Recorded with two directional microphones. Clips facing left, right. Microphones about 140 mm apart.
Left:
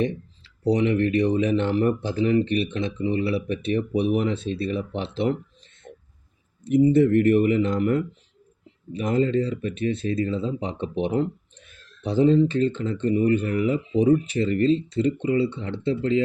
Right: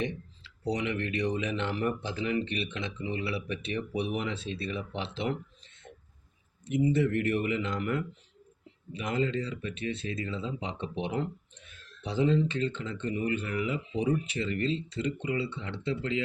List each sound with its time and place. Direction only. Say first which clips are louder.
0.0 s a sound: left 8 dB; 40° left (ahead or behind)
0.7 s speech: left 11 dB; 35° left (ahead or behind)
6.7 s speech: left 9 dB; 45° left (ahead or behind)
14.9 s speech: left 9 dB; 30° left (ahead or behind)